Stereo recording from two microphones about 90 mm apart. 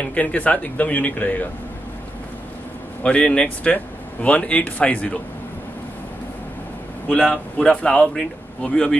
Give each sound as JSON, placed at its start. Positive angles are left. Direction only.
{"t": 0.0, "sound": "speech", "side_deg": 15}
{"t": 3.0, "sound": "speech", "side_deg": 15}
{"t": 7.1, "sound": "speech", "side_deg": 10}